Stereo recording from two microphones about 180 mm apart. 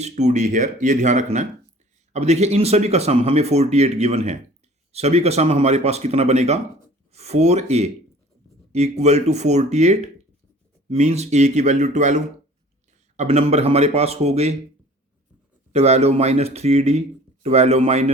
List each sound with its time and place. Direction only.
0.0 s speech: 40° right (ahead or behind)
15.7 s speech: 35° right (ahead or behind)